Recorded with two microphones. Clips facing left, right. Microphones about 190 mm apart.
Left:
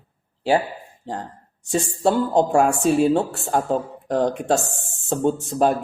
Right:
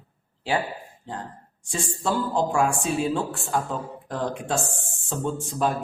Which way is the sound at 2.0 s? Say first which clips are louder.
Left 6 dB; 65° left (ahead or behind).